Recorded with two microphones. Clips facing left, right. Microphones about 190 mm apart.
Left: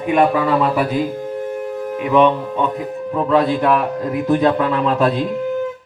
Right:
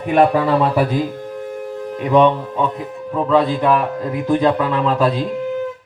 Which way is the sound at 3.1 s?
Centre (ahead or behind).